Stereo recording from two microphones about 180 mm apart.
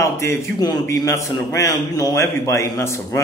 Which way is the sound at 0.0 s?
15° left (ahead or behind).